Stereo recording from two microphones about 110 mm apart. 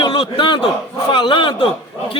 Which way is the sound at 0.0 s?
45° left (ahead or behind).